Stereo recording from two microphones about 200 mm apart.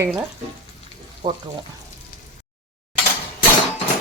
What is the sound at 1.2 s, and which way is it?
Speech, 25° right (ahead or behind).